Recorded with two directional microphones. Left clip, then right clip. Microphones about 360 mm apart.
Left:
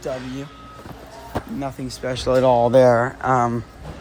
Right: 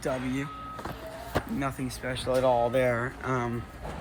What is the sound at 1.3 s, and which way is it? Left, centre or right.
Speech, centre.